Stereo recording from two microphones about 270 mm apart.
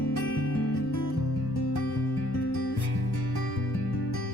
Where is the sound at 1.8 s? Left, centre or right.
Left.